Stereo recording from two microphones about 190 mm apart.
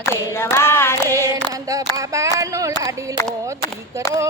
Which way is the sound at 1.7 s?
15° right (ahead or behind).